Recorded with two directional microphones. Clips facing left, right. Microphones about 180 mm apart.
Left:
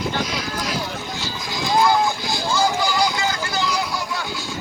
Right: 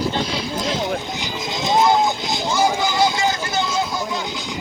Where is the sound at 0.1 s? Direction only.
30° right (ahead or behind).